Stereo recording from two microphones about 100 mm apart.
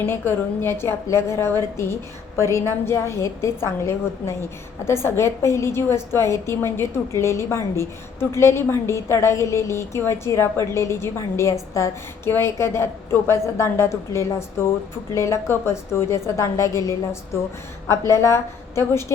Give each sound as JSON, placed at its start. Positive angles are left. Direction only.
{"t": 0.0, "sound": "a woman's voice", "side_deg": 20}